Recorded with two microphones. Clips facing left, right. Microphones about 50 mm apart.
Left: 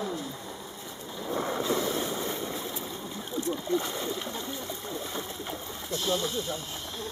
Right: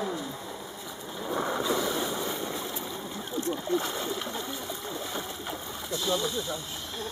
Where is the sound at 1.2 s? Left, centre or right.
Centre.